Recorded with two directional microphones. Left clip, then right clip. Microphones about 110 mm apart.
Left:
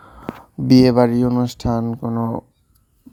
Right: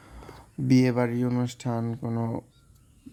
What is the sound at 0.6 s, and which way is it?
Speech, 80° left.